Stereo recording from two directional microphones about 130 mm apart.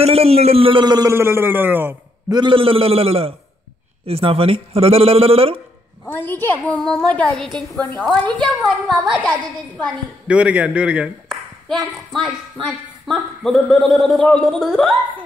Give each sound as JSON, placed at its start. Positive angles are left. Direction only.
{"t": 0.0, "sound": "speech", "side_deg": -50}
{"t": 0.8, "sound": "a man's voice", "side_deg": -30}
{"t": 1.1, "sound": "a man's voice", "side_deg": -20}
{"t": 2.3, "sound": "speech", "side_deg": -40}
{"t": 6.0, "sound": "a woman's voice", "side_deg": 15}
{"t": 13.0, "sound": "a man's voice", "side_deg": 0}